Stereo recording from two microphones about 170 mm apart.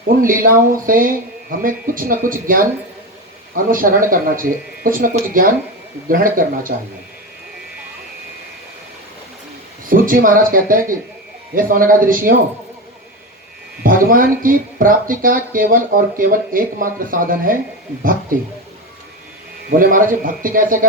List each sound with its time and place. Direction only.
0.2 s speech: 55° right (ahead or behind)
9.8 s speech: 55° right (ahead or behind)
13.8 s speech: 55° right (ahead or behind)
19.7 s speech: 55° right (ahead or behind)